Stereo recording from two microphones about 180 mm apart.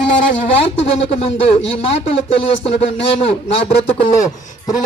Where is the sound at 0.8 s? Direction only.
35° left (ahead or behind).